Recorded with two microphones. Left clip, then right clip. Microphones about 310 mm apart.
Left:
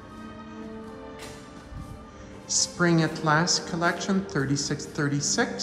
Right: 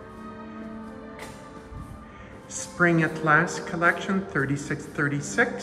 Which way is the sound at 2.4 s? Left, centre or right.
Centre.